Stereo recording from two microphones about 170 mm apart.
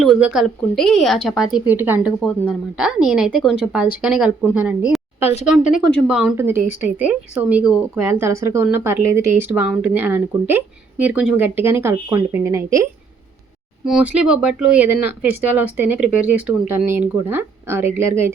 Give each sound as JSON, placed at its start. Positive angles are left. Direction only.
{"t": 0.0, "sound": "a sound", "side_deg": 0}
{"t": 0.3, "sound": "a woman's voice", "side_deg": 0}
{"t": 2.2, "sound": "speech", "side_deg": 10}
{"t": 2.7, "sound": "a woman's voice", "side_deg": -5}
{"t": 5.2, "sound": "speech", "side_deg": 40}
{"t": 5.9, "sound": "a woman's voice", "side_deg": 0}
{"t": 6.3, "sound": "speech", "side_deg": -15}
{"t": 8.0, "sound": "speech", "side_deg": -15}
{"t": 13.8, "sound": "speech", "side_deg": -5}